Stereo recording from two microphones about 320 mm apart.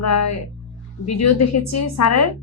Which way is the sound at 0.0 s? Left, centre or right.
Left.